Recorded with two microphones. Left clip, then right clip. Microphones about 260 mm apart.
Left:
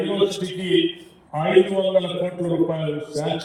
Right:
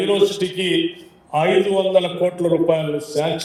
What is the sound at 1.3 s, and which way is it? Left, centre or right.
A man's voice, right.